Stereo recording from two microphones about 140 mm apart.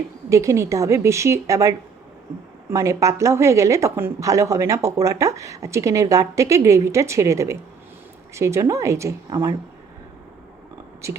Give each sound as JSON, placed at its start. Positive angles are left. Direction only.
{"t": 0.3, "sound": "a woman's voice", "side_deg": -20}